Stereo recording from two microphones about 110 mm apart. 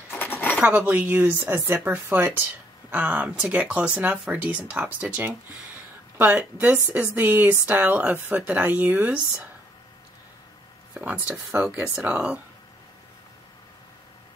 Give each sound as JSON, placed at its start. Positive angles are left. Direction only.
{"t": 0.1, "sound": "a sound", "side_deg": 20}
{"t": 0.6, "sound": "speech", "side_deg": -10}
{"t": 11.2, "sound": "speech", "side_deg": -15}